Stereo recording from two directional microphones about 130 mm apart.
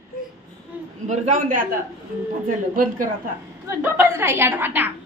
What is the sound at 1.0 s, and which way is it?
Speech, 70° right (ahead or behind).